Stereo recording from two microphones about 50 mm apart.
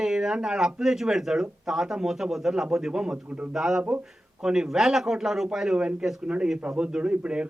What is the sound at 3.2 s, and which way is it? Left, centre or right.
Speech, right.